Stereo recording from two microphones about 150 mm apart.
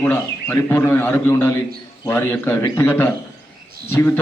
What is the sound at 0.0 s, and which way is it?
A man's voice, 15° left (ahead or behind).